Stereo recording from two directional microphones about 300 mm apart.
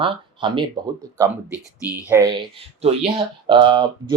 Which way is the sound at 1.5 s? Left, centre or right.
Centre.